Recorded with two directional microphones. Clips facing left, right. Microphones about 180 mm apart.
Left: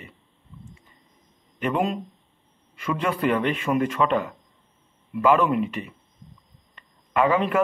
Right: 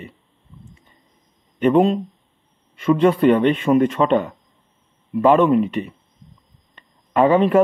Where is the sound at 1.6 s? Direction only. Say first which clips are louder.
Right 9 dB; 30° right (ahead or behind).